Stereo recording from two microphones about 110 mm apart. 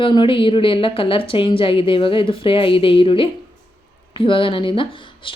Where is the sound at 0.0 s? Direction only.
50° left (ahead or behind).